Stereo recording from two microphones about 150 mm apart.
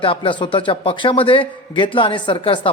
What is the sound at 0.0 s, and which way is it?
A man's voice, 35° left (ahead or behind).